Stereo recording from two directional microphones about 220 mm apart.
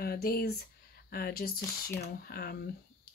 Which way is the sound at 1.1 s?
45° left (ahead or behind).